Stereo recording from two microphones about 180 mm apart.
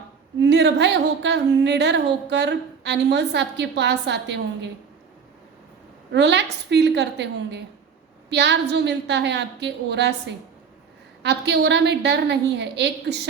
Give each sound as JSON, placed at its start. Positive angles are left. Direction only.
{"t": 0.4, "sound": "speech", "side_deg": -70}
{"t": 6.1, "sound": "speech", "side_deg": -70}